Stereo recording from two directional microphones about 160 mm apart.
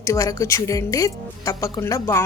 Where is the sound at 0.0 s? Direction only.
20° left (ahead or behind).